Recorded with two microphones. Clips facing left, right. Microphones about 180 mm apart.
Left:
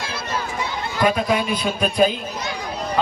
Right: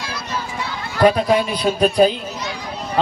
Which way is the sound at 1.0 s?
35° right (ahead or behind).